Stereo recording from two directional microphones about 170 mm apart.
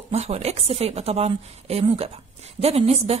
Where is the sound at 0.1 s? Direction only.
40° right (ahead or behind).